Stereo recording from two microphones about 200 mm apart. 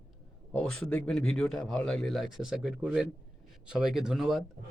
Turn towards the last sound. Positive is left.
turn(degrees=0)  # may be behind; listen again after turning